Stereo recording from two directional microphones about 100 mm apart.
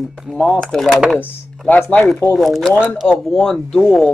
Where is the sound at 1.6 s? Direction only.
15° left (ahead or behind).